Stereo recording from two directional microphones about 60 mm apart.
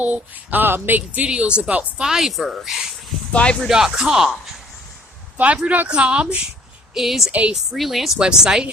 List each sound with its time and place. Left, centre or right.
0.0 s a woman's voice: right
2.0 s speech: centre
3.3 s speech: centre
3.7 s speech: centre
5.6 s a woman's voice: right
5.9 s speech: centre
6.9 s speech: centre
7.3 s a woman's voice: centre
7.7 s speech: centre